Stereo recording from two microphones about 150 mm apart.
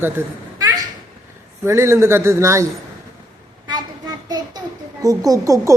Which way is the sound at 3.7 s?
25° right (ahead or behind).